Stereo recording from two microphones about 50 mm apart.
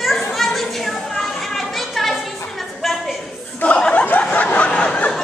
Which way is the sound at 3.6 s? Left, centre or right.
Left.